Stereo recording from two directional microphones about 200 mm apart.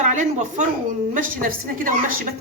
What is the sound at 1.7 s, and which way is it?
Speech, 45° right (ahead or behind).